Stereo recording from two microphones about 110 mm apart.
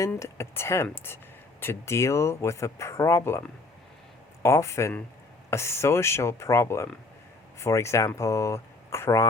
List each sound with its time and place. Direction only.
0.2 s speech: 25° left (ahead or behind)
4.4 s speech: 25° left (ahead or behind)